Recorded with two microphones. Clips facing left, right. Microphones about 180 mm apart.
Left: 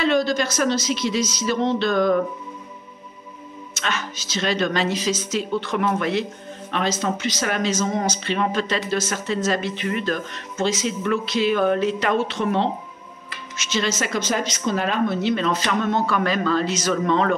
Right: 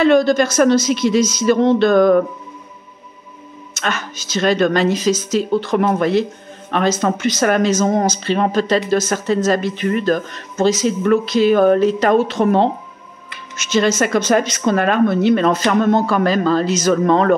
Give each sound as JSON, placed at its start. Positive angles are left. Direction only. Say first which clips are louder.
{"t": 0.0, "sound": "speech", "louder": "right 7 dB", "side_deg": -50}
{"t": 3.7, "sound": "speech", "louder": "right 4 dB", "side_deg": -50}
{"t": 6.7, "sound": "speech", "louder": "right 6 dB", "side_deg": -50}